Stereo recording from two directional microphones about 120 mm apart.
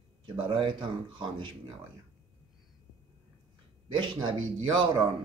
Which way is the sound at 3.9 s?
40° right (ahead or behind).